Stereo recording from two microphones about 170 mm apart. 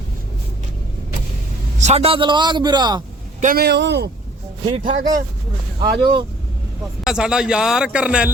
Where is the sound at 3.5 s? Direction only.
80° right.